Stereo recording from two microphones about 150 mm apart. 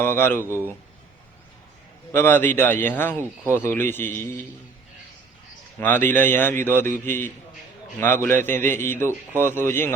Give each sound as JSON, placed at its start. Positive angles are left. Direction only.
{"t": 0.0, "sound": "a man's voice", "side_deg": 15}
{"t": 0.4, "sound": "a man's voice", "side_deg": -15}
{"t": 2.1, "sound": "a man's voice", "side_deg": 15}
{"t": 5.8, "sound": "a man's voice", "side_deg": 15}